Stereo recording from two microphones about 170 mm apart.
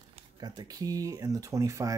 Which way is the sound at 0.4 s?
20° right (ahead or behind).